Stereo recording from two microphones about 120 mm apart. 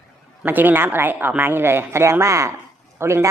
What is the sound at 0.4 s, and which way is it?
A woman's voice, 15° right (ahead or behind).